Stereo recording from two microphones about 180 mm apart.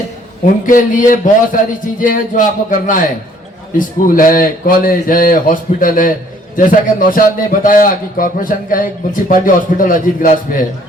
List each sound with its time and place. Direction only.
0.6 s a man's voice: 45° left (ahead or behind)